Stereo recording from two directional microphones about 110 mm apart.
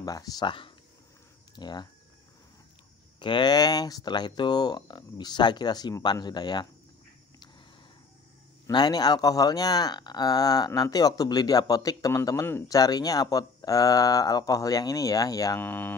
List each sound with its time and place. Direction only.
0.0 s speech: 35° left (ahead or behind)
0.5 s speech: 50° left (ahead or behind)
1.5 s speech: 40° left (ahead or behind)
3.2 s speech: 45° left (ahead or behind)
8.7 s speech: 40° left (ahead or behind)
15.6 s speech: 15° left (ahead or behind)